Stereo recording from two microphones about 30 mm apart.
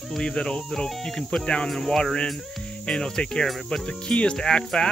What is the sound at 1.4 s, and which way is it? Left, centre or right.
Speech, left.